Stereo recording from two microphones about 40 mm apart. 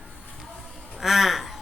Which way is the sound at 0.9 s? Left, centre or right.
Centre.